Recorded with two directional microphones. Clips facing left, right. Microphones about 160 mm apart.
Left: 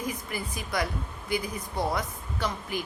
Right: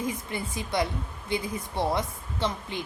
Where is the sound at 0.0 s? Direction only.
25° right (ahead or behind).